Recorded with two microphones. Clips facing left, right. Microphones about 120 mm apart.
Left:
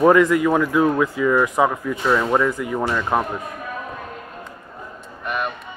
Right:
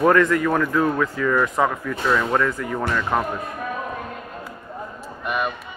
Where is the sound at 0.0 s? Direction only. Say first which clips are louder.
Left 3 dB; 15° left (ahead or behind).